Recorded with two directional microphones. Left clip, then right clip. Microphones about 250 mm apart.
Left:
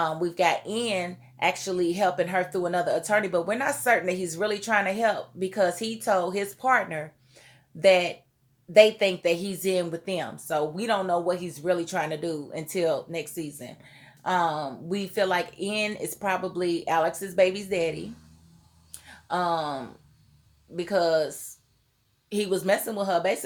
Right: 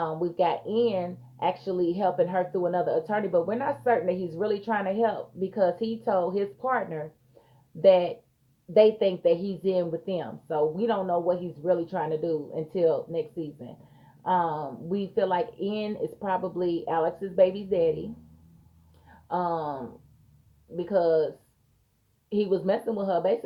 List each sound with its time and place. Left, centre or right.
0.0 s speech: left
18.9 s a sound: left
20.7 s speech: left
22.3 s speech: left